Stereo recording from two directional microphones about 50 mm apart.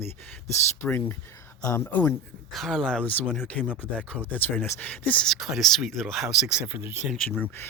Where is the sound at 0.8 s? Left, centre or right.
Left.